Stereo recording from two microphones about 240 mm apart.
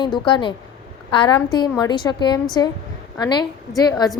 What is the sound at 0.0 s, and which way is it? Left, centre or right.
A woman's voice, centre.